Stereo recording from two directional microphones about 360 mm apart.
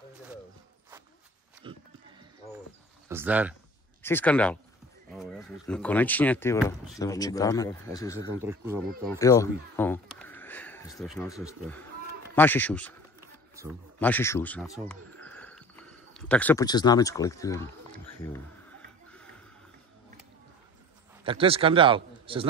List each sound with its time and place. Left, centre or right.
1.6 s a sound: centre
3.1 s speech: centre
8.5 s speech: centre
9.2 s speech: centre
13.9 s speech: centre
21.2 s a man's voice: centre